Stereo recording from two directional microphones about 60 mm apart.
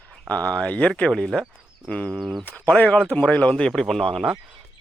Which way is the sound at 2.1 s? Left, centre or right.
Centre.